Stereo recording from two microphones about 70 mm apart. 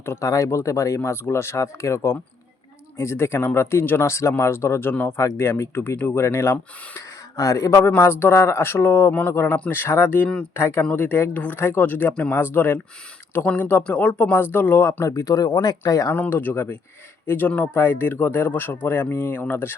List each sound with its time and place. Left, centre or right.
0.0 s speech: left
7.9 s speech: left
15.1 s speech: left
15.8 s speech: left
16.1 s speech: left